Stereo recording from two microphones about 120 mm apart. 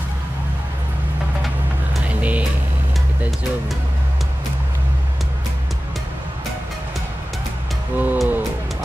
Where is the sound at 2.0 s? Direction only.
10° right (ahead or behind).